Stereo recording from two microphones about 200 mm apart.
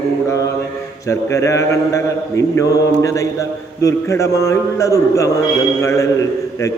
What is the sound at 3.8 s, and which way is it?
A man's voice, 15° left (ahead or behind).